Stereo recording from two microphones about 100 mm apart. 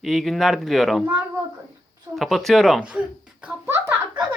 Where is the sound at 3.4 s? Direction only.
25° right (ahead or behind).